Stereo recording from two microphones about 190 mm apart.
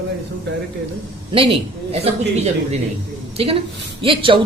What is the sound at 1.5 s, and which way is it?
Speech, 30° right (ahead or behind).